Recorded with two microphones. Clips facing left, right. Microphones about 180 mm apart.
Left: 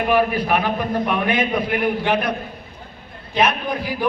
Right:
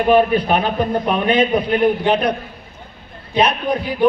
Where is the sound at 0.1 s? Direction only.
25° right (ahead or behind).